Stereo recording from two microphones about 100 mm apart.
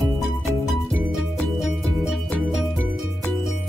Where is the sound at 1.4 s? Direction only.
Centre (ahead or behind).